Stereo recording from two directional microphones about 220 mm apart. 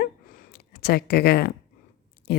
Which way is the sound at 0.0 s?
40° left (ahead or behind).